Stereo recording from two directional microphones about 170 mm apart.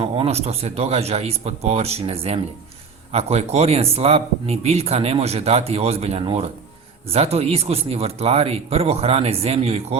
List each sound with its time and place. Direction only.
0.0 s speech: 35° right (ahead or behind)